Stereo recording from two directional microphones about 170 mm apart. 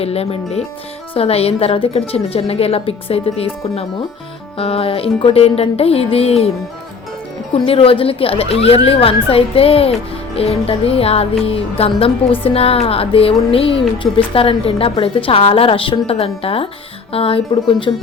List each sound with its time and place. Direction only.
0.0 s a woman's voice: 35° left (ahead or behind)
7.5 s a woman's voice: 30° left (ahead or behind)